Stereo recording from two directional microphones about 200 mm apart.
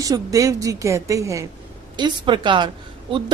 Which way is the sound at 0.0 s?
15° right (ahead or behind).